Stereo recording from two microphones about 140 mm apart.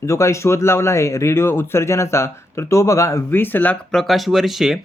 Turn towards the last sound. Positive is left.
turn(degrees=0)  # may be behind; listen again after turning